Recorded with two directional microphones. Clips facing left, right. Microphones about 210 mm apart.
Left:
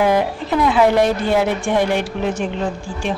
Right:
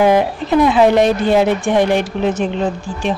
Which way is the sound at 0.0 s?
20° right (ahead or behind).